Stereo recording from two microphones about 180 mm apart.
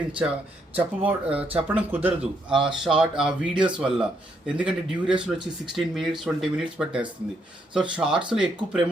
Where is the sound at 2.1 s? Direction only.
25° right (ahead or behind).